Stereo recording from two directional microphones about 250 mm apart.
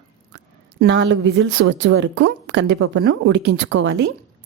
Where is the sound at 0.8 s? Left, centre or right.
Right.